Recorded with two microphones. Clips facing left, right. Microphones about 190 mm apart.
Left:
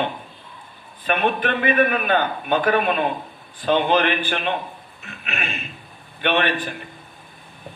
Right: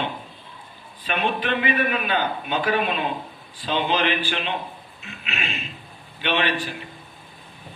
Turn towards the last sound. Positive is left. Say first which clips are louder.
# left 2 dB
turn(degrees=55)  # may be behind; listen again after turning